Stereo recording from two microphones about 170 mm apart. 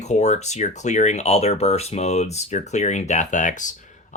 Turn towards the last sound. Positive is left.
turn(degrees=50)  # may be behind; listen again after turning